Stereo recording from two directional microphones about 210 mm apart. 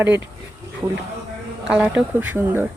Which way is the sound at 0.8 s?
10° right (ahead or behind).